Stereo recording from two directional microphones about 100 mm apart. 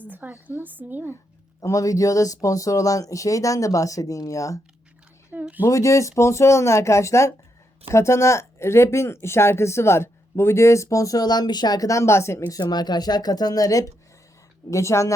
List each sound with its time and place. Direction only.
0.1 s a woman's voice: 15° right (ahead or behind)
1.6 s speech: 35° left (ahead or behind)
5.3 s speech: 15° right (ahead or behind)
5.6 s speech: 30° left (ahead or behind)
12.5 s speech: 45° left (ahead or behind)